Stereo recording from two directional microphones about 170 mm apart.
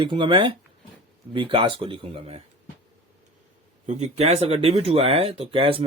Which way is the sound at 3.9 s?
40° right (ahead or behind).